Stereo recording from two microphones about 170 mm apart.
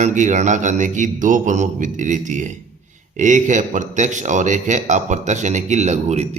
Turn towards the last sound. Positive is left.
turn(degrees=-40)  # may be behind; listen again after turning